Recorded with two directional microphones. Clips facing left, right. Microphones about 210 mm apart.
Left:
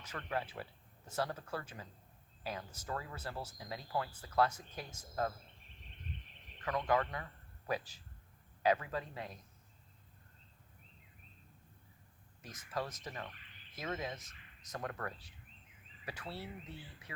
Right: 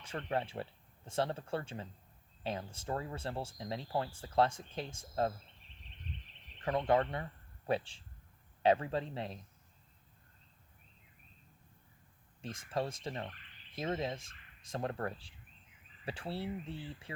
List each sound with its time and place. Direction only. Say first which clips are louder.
0.0 s speech: right 4 dB; 30° right (ahead or behind)
6.6 s speech: right 4 dB; 30° right (ahead or behind)
12.4 s speech: right 4 dB; 30° right (ahead or behind)